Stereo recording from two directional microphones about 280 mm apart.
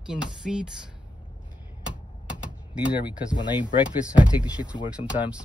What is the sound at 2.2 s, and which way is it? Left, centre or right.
Typing, centre.